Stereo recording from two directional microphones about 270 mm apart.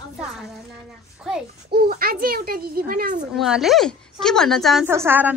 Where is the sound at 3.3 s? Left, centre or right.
Centre.